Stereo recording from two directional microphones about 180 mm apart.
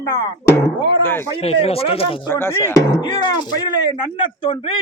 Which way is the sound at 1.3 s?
30° left (ahead or behind).